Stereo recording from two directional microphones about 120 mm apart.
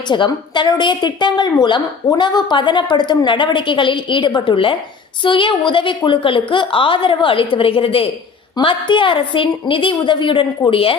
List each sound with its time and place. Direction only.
0.1 s a woman's voice: 40° left (ahead or behind)